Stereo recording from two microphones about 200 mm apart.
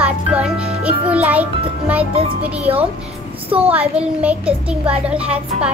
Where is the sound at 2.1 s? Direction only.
30° right (ahead or behind).